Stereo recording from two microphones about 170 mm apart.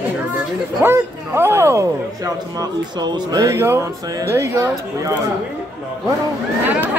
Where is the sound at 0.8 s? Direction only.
15° right (ahead or behind).